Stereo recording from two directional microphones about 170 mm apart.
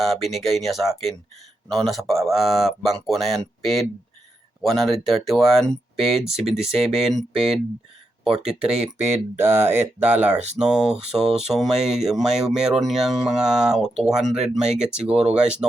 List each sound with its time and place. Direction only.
0.0 s speech: centre (ahead or behind)
9.4 s speech: 15° right (ahead or behind)
10.3 s speech: 40° right (ahead or behind)
10.6 s speech: 5° right (ahead or behind)